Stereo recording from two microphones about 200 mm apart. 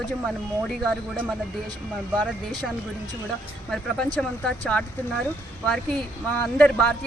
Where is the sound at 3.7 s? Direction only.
5° left (ahead or behind).